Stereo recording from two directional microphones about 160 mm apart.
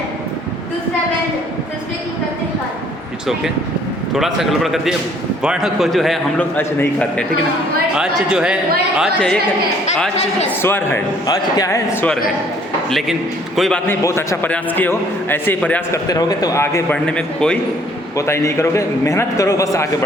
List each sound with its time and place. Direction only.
4.1 s a man's voice: centre (ahead or behind)
6.6 s a man's voice: 10° left (ahead or behind)
7.9 s a man's voice: 5° right (ahead or behind)
10.6 s a man's voice: 15° left (ahead or behind)
12.9 s a man's voice: centre (ahead or behind)
16.0 s a man's voice: 25° left (ahead or behind)
16.9 s a man's voice: 5° left (ahead or behind)
18.2 s a man's voice: 20° left (ahead or behind)